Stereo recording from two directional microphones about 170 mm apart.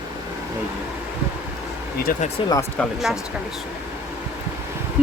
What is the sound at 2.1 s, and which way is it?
Speech, 55° left (ahead or behind).